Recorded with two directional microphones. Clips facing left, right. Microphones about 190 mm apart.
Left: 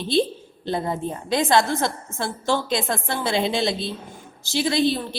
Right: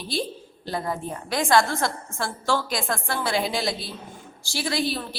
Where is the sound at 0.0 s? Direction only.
25° left (ahead or behind).